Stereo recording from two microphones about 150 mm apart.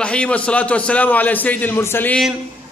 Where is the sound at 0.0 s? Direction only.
5° left (ahead or behind).